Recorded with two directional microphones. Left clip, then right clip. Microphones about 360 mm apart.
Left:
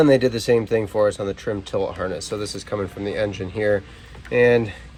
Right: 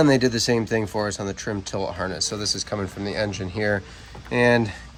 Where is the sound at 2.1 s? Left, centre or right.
Centre.